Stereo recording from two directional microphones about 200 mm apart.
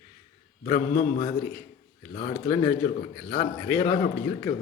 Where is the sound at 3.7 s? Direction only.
10° left (ahead or behind).